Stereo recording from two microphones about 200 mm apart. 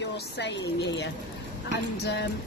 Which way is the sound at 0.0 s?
60° left (ahead or behind).